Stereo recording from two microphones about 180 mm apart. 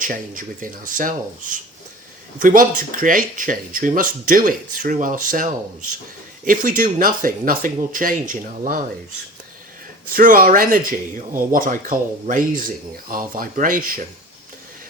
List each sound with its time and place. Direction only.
0.0 s speech: 50° right (ahead or behind)
10.1 s speech: 50° right (ahead or behind)